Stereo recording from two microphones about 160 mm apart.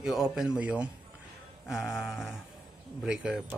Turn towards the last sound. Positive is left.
turn(degrees=-5)  # may be behind; listen again after turning